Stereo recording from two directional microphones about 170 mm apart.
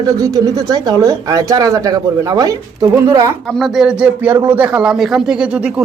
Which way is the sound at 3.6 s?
Centre (ahead or behind).